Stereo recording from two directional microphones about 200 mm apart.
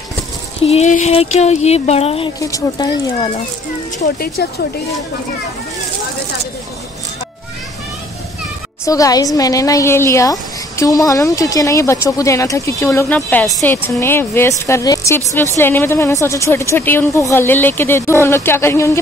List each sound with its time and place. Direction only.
0.6 s speech: 30° left (ahead or behind)
2.4 s speech: 15° left (ahead or behind)
4.4 s a woman's voice: 55° left (ahead or behind)
8.8 s speech: 15° left (ahead or behind)